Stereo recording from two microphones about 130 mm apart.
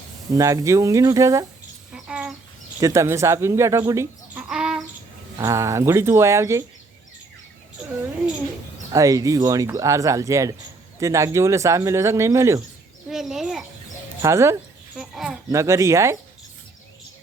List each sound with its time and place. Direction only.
0.3 s speech: 25° right (ahead or behind)
1.9 s bird: 5° right (ahead or behind)
2.8 s speech: 25° right (ahead or behind)
4.4 s bird: 5° right (ahead or behind)
5.4 s speech: 25° right (ahead or behind)
8.9 s speech: 25° right (ahead or behind)
13.1 s a sound: 5° right (ahead or behind)
14.2 s speech: 20° right (ahead or behind)
14.9 s a sound: 5° right (ahead or behind)
15.4 s speech: 20° right (ahead or behind)